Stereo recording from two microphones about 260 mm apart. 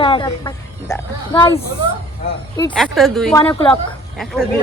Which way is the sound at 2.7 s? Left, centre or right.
Centre.